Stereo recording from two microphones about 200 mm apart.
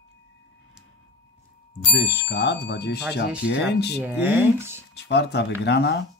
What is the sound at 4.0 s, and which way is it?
Speech, 10° right (ahead or behind).